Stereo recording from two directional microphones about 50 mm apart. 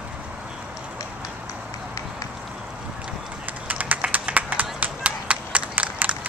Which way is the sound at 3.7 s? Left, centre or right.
Right.